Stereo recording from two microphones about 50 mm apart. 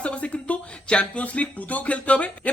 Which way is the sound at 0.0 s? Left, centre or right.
Left.